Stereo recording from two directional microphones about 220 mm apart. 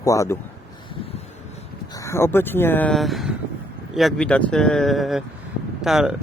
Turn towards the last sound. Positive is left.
turn(degrees=0)  # may be behind; listen again after turning